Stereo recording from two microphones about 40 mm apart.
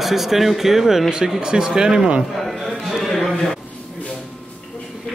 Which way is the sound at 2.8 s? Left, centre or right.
Centre.